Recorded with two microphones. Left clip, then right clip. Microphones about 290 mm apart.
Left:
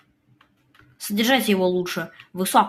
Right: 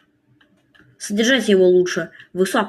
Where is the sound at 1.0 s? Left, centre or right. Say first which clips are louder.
Right 3 dB; centre.